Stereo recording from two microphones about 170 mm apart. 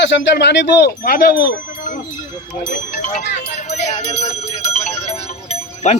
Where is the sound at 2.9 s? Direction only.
50° left (ahead or behind).